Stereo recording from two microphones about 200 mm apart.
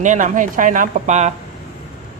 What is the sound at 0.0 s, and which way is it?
A man's voice, 40° right (ahead or behind).